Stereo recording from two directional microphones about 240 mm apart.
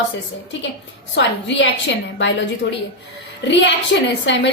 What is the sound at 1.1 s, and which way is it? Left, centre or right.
Speech, left.